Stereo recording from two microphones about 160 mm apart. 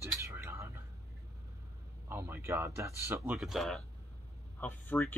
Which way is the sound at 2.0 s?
15° right (ahead or behind).